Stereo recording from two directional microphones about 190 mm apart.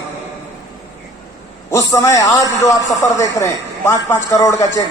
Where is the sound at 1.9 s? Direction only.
15° left (ahead or behind).